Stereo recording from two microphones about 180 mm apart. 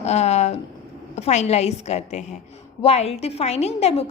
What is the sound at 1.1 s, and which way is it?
A woman's voice, 40° left (ahead or behind).